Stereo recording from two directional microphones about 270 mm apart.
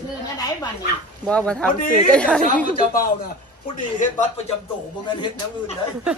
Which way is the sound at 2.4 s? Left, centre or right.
Left.